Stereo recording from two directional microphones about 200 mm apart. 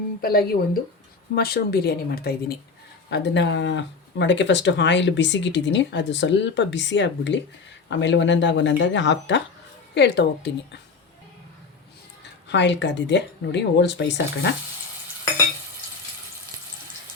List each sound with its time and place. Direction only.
0.2 s speech: 50° left (ahead or behind)
3.1 s speech: 60° left (ahead or behind)
12.2 s speech: 60° left (ahead or behind)